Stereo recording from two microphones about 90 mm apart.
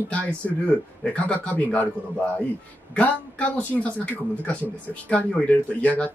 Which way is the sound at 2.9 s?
15° left (ahead or behind).